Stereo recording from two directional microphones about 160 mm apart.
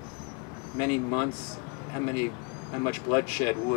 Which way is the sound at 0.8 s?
20° left (ahead or behind).